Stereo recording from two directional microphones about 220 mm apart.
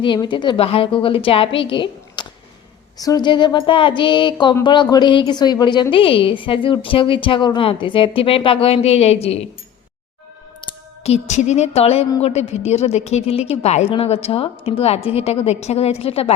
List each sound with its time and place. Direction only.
0.0 s speech: 20° left (ahead or behind)
10.6 s speech: 25° left (ahead or behind)